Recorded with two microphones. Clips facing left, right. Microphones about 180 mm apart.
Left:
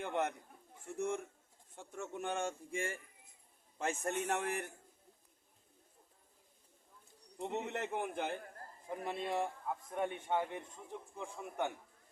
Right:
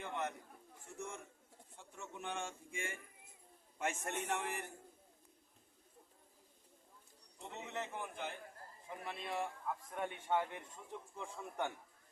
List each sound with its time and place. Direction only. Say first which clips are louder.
0.0 s a sound: left 5 dB; 50° left (ahead or behind)
0.9 s a man's voice: left 10 dB; 50° left (ahead or behind); by 4.1 s 30° left (ahead or behind)
4.3 s speech: left 2 dB; 45° left (ahead or behind)
7.3 s a man's voice: left 6 dB; 60° left (ahead or behind)
9.0 s a man's voice: left 5 dB; 40° left (ahead or behind)
9.9 s a man's voice: left 2 dB; 20° left (ahead or behind)
11.2 s a man's voice: left 3 dB; 10° left (ahead or behind)